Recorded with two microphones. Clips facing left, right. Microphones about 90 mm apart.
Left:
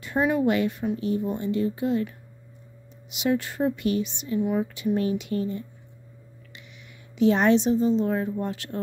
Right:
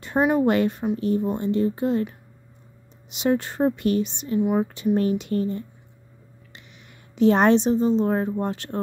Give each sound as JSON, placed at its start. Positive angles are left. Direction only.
{"t": 0.2, "sound": "a woman's voice", "side_deg": -30}
{"t": 0.5, "sound": "a woman's voice", "side_deg": -45}
{"t": 3.1, "sound": "a woman's voice", "side_deg": -40}
{"t": 7.2, "sound": "a woman's voice", "side_deg": -45}